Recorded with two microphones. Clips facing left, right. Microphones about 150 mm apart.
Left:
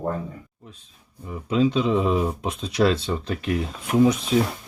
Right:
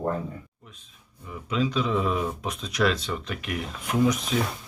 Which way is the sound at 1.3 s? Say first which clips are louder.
Left 6 dB; 30° left (ahead or behind).